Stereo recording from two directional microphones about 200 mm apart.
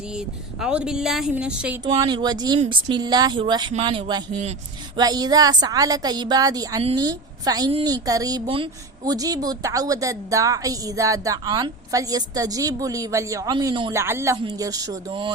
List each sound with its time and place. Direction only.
0.1 s speech: 5° right (ahead or behind)
1.8 s a woman's voice: 20° right (ahead or behind)
4.9 s a woman's voice: 20° right (ahead or behind)